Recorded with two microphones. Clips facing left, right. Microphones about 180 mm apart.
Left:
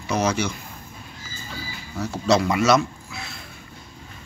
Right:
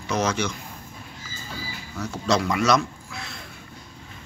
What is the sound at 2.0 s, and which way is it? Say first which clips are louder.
Speech: left 3 dB; 5° left (ahead or behind).